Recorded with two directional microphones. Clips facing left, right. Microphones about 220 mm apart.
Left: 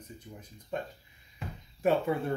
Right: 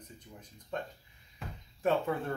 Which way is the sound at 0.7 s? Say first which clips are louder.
Left 2 dB; 10° left (ahead or behind).